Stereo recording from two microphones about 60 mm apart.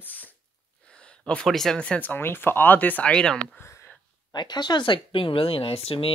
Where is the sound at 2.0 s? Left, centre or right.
Left.